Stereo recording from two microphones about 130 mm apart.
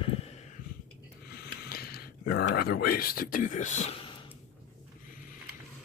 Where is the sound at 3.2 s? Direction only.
90° left; by 3.9 s 65° left (ahead or behind).